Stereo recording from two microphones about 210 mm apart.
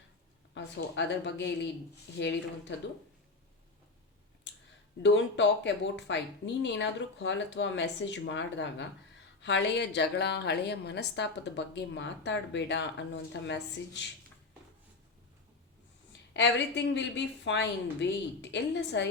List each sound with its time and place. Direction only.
0.5 s a woman's voice: 55° left (ahead or behind)
4.5 s clicking: 55° left (ahead or behind)
5.0 s a woman's voice: 55° left (ahead or behind)
16.3 s a woman's voice: 55° left (ahead or behind)